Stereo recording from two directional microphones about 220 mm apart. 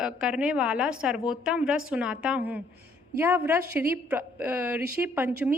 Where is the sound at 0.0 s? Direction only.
5° right (ahead or behind).